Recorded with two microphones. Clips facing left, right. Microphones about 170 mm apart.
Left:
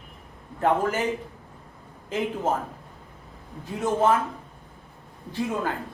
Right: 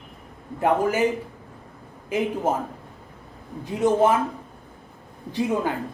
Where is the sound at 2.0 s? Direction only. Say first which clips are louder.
Right 3 dB; 10° right (ahead or behind).